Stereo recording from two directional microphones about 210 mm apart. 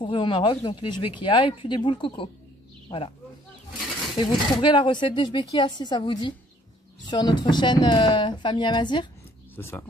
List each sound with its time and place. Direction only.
0.0 s speech: 25° left (ahead or behind)
4.2 s speech: 20° left (ahead or behind)
9.6 s speech: 10° left (ahead or behind)